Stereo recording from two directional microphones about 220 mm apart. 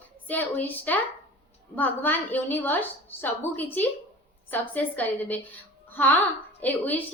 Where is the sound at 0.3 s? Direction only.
10° left (ahead or behind).